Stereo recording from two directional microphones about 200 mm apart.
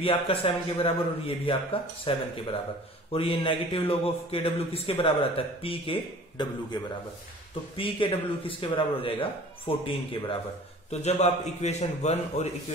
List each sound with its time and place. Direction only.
0.0 s a man's voice: 30° left (ahead or behind)